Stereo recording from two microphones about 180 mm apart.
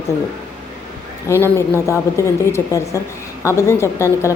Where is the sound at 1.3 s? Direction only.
15° left (ahead or behind).